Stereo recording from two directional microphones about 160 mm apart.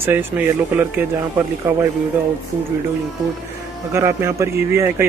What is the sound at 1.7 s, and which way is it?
Speech, 10° right (ahead or behind).